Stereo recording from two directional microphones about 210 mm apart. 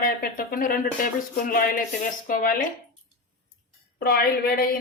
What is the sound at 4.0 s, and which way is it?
Speech, 45° left (ahead or behind).